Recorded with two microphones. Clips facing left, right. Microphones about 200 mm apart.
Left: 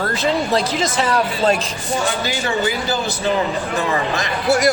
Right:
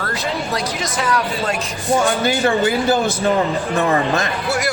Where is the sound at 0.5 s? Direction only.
30° left (ahead or behind).